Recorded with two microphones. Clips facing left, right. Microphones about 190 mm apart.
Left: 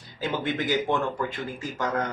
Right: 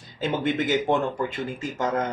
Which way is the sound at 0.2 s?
25° right (ahead or behind).